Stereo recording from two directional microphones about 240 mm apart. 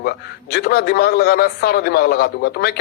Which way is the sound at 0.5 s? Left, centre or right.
Left.